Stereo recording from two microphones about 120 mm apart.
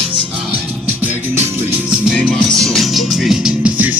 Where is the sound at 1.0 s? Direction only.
15° right (ahead or behind).